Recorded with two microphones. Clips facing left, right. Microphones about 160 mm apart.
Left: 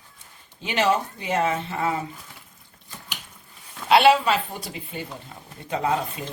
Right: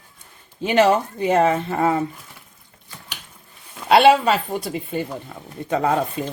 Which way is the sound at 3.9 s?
45° right (ahead or behind).